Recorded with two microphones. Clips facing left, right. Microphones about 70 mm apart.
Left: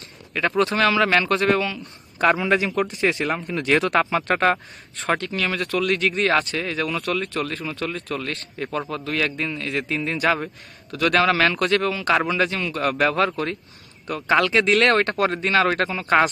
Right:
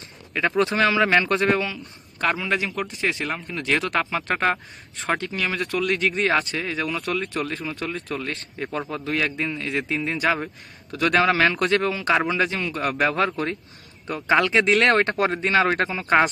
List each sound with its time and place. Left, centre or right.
0.3 s speech: centre
1.8 s a man's voice: centre